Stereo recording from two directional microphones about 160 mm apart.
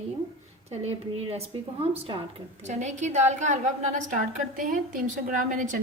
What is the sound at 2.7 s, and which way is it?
A woman's voice, 45° right (ahead or behind).